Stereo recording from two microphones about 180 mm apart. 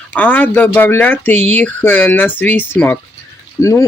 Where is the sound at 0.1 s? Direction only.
10° left (ahead or behind).